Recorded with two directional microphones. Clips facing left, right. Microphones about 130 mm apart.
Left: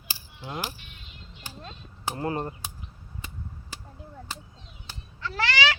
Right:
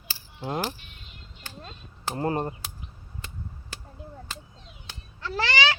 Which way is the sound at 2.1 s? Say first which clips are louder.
Right 3 dB; 30° right (ahead or behind).